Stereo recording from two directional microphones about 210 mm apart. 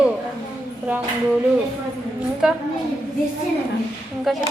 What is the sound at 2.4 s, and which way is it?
Speech, 5° right (ahead or behind).